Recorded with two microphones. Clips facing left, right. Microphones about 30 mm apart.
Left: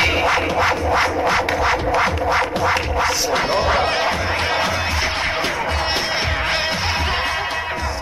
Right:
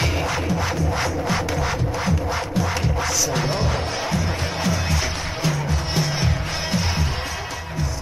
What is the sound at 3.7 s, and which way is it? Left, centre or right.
Music, left.